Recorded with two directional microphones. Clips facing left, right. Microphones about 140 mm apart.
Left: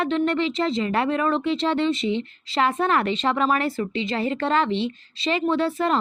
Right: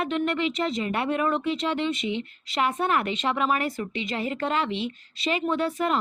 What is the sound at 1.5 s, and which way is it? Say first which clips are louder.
A woman's voice: left 5 dB; 30° left (ahead or behind).